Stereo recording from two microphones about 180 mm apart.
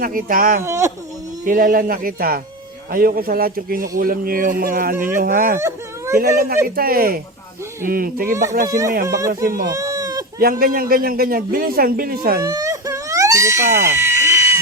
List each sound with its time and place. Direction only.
0.0 s a man's voice: 50° right (ahead or behind)
0.6 s speech: 15° right (ahead or behind)
1.5 s a man's voice: 50° right (ahead or behind)
5.5 s whimper: 15° right (ahead or behind)
6.7 s a man's voice: 55° right (ahead or behind)
8.3 s speech: 15° right (ahead or behind)
9.3 s a man's voice: 50° right (ahead or behind)
9.6 s a sound: 20° right (ahead or behind)
10.4 s a man's voice: 55° right (ahead or behind)
12.4 s baby cry: 20° right (ahead or behind)